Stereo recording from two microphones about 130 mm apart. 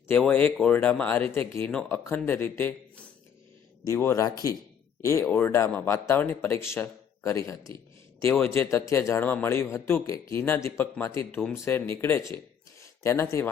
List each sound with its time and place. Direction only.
0.1 s speech: 15° left (ahead or behind)
5.2 s speech: 15° left (ahead or behind)